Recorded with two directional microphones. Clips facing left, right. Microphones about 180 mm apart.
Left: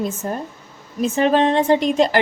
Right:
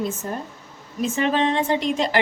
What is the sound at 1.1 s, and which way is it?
A woman's voice, 45° left (ahead or behind).